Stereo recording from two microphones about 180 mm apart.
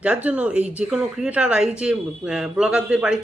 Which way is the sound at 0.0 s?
5° right (ahead or behind).